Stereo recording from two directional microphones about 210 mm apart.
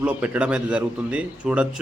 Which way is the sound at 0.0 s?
5° right (ahead or behind).